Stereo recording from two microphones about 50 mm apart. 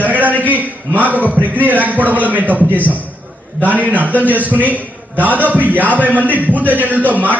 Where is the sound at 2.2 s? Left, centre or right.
Right.